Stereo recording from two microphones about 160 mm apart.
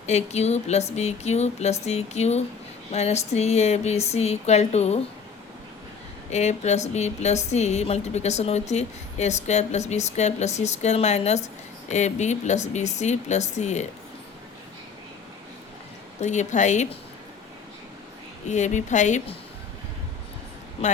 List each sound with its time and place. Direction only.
0.0 s speech: 45° left (ahead or behind)
6.3 s speech: 45° left (ahead or behind)
16.2 s speech: 45° left (ahead or behind)
18.4 s speech: 45° left (ahead or behind)